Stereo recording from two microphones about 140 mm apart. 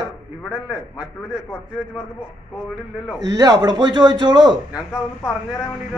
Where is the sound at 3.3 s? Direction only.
30° right (ahead or behind).